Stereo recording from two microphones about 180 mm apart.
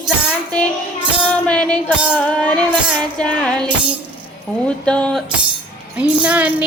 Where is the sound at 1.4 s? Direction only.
5° left (ahead or behind).